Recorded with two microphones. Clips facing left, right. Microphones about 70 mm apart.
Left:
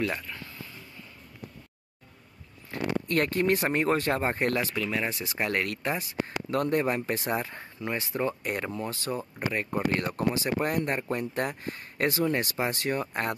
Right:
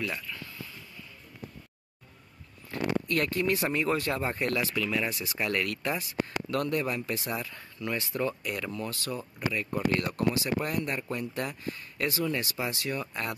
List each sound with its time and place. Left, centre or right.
0.1 s a sound: left
2.7 s speech: left
8.4 s speech: left